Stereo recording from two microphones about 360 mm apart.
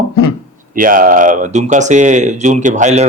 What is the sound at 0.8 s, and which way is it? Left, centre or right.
Speech, right.